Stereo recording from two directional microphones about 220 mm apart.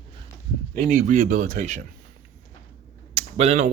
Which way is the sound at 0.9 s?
35° right (ahead or behind).